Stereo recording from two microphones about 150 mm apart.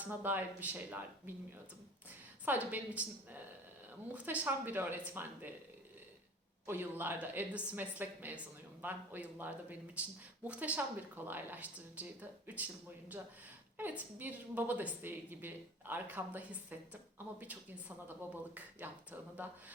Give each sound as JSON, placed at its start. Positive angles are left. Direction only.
{"t": 0.0, "sound": "a woman's voice", "side_deg": -10}
{"t": 2.4, "sound": "a woman's voice", "side_deg": -10}
{"t": 6.7, "sound": "a woman's voice", "side_deg": -15}
{"t": 13.7, "sound": "a woman's voice", "side_deg": -10}